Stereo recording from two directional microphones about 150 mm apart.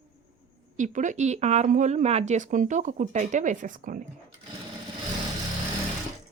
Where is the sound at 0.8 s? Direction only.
55° right (ahead or behind).